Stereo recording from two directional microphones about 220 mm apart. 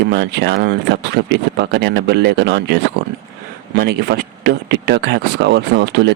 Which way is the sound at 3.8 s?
45° right (ahead or behind).